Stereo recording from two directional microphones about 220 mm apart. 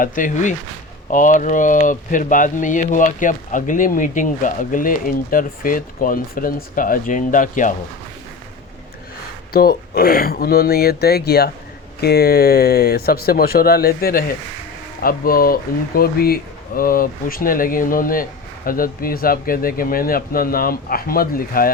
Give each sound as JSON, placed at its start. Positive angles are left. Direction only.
{"t": 0.0, "sound": "speech", "side_deg": 35}
{"t": 9.5, "sound": "speech", "side_deg": 45}